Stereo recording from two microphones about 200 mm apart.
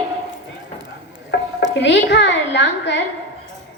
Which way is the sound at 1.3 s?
60° left (ahead or behind).